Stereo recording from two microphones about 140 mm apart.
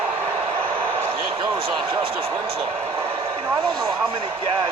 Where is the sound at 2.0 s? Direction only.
40° right (ahead or behind).